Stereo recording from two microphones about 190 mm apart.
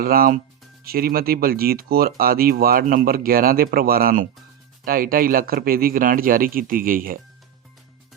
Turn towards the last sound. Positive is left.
turn(degrees=-50)  # may be behind; listen again after turning